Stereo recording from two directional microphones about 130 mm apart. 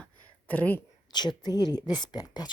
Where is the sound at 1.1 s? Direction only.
35° left (ahead or behind).